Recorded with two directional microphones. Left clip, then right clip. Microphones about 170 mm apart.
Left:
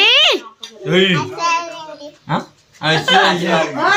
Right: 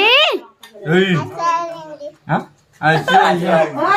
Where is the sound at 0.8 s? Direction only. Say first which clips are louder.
Left 1 dB; 45° right (ahead or behind).